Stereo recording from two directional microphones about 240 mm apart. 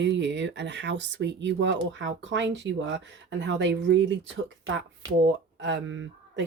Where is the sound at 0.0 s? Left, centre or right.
Right.